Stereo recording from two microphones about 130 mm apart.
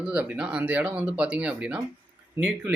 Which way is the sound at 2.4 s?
25° right (ahead or behind).